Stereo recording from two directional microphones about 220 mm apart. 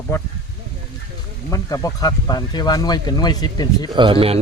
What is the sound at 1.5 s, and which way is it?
Speech, 15° left (ahead or behind).